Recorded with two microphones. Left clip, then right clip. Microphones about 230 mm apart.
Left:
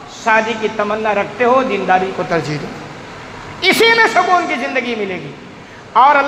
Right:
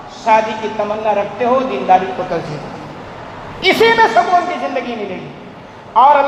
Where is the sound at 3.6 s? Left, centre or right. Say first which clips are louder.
Even; left.